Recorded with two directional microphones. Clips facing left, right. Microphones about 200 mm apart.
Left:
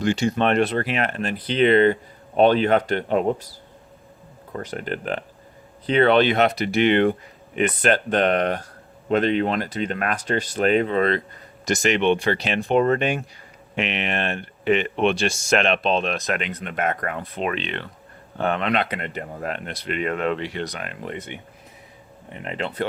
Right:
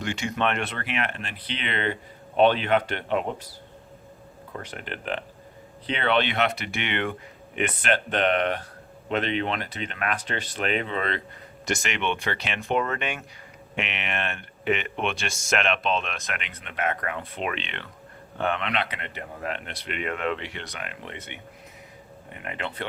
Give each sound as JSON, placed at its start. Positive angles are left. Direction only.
{"t": 0.0, "sound": "speech", "side_deg": 35}
{"t": 4.6, "sound": "speech", "side_deg": 40}
{"t": 22.4, "sound": "speech", "side_deg": 35}